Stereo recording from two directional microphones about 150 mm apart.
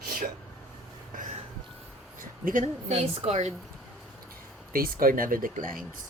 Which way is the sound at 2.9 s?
40° right (ahead or behind).